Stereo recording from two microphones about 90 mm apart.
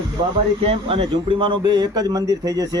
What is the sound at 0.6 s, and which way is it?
A man's voice, 90° right.